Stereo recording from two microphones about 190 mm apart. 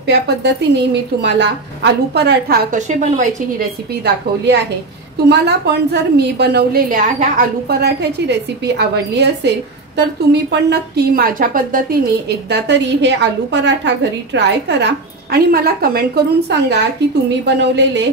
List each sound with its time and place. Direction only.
0.0 s a woman's voice: 60° right (ahead or behind); by 3.6 s 40° right (ahead or behind)
4.0 s a woman's voice: 65° right (ahead or behind); by 11.8 s 45° right (ahead or behind)
12.3 s a woman's voice: 60° right (ahead or behind)